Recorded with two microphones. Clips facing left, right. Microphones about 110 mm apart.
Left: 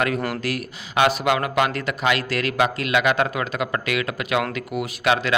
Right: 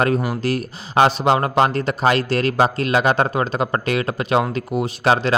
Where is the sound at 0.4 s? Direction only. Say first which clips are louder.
Right 5 dB; 30° right (ahead or behind).